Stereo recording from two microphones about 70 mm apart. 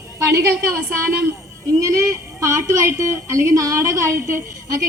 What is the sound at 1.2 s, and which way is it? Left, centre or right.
A woman's voice, right.